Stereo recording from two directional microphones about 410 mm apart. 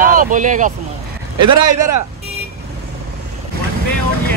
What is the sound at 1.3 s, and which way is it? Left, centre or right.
Speech, right.